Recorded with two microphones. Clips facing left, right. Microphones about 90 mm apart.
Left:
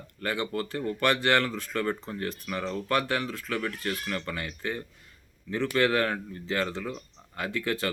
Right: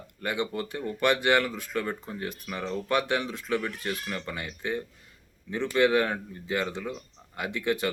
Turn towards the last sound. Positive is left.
turn(degrees=-20)  # may be behind; listen again after turning